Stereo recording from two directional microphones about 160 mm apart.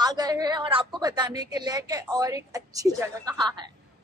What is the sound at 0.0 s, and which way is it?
A woman's voice, 25° right (ahead or behind).